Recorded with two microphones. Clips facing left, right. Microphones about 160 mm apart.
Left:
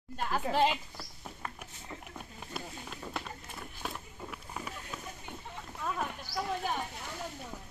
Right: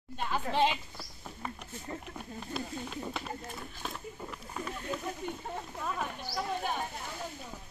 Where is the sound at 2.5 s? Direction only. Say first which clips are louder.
Right 5 dB; centre (ahead or behind).